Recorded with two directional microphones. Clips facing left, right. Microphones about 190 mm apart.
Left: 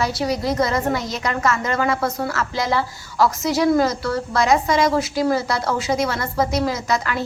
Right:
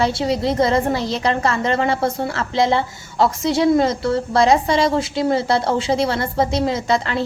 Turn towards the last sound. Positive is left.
turn(degrees=-30)  # may be behind; listen again after turning